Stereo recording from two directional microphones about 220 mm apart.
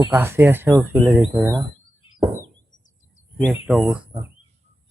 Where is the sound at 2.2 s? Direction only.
15° right (ahead or behind).